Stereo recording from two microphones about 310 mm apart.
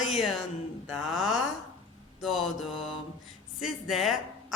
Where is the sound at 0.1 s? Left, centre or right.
Centre.